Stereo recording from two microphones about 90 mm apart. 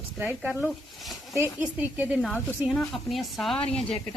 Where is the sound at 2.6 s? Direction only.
Centre (ahead or behind).